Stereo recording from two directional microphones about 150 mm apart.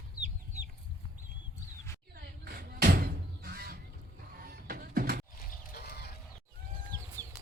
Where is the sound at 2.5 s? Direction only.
85° right.